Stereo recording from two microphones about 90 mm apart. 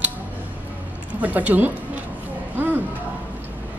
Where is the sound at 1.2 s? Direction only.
15° right (ahead or behind).